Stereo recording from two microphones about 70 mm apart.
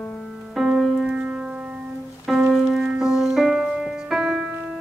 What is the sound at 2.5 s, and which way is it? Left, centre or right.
Music, centre.